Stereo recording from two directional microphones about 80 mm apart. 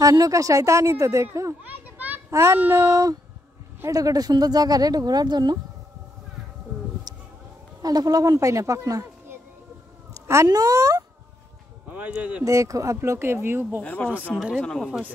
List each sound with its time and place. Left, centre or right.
0.0 s speech: right
1.9 s children playing: right
2.7 s speech: right
3.8 s speech: right
7.8 s speech: right
10.1 s cat: right
10.5 s speech: right
12.1 s speech: centre
12.4 s speech: right
13.7 s speech: centre